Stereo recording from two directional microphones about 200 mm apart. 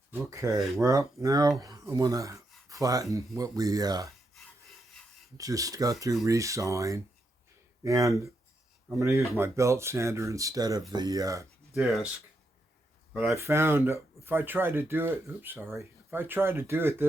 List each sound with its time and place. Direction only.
0.3 s speech: 15° right (ahead or behind)
4.4 s rub: centre (ahead or behind)
5.4 s speech: 15° right (ahead or behind)
11.7 s speech: centre (ahead or behind)
13.1 s speech: 10° right (ahead or behind)